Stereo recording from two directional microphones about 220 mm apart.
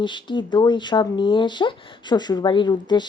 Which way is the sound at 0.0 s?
20° left (ahead or behind).